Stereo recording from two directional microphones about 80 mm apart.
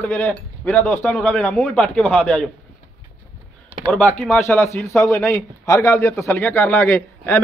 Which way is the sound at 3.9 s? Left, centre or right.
Left.